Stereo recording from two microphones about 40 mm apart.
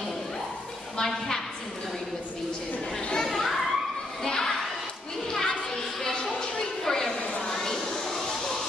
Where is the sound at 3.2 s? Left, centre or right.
Centre.